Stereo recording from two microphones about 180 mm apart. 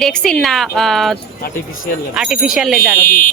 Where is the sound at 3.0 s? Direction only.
50° left (ahead or behind).